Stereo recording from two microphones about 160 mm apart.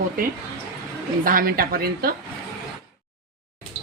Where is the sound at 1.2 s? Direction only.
60° right (ahead or behind).